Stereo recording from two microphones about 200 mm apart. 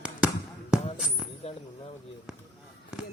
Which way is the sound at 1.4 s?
30° left (ahead or behind).